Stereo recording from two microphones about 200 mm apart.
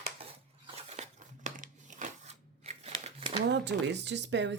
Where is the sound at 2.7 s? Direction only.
30° right (ahead or behind).